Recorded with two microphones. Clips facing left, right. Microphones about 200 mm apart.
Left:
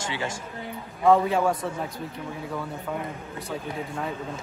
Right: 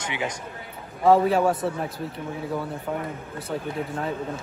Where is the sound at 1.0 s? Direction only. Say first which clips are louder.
Right 2 dB; 30° right (ahead or behind).